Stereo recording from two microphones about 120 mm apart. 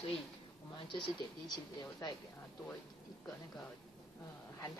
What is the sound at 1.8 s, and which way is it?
Speech, 30° left (ahead or behind).